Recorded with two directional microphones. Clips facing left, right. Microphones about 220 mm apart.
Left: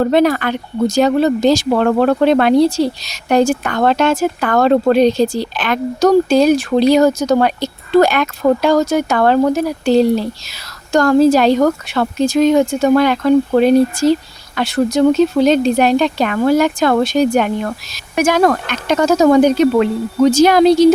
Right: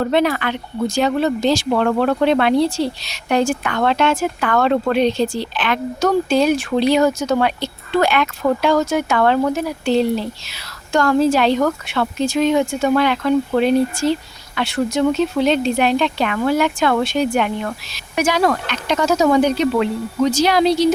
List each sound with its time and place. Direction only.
0.0 s speech: 40° left (ahead or behind)